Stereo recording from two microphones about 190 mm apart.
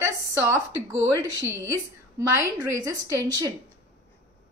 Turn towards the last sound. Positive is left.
turn(degrees=-20)  # may be behind; listen again after turning